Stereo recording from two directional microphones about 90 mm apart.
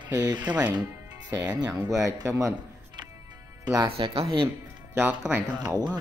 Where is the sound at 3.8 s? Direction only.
85° right.